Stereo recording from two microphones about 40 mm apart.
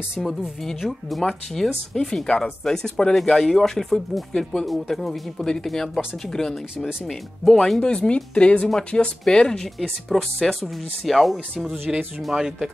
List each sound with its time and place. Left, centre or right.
0.7 s speech: centre
1.2 s speech: centre
7.8 s speech: left
9.8 s speech: centre
12.2 s speech: centre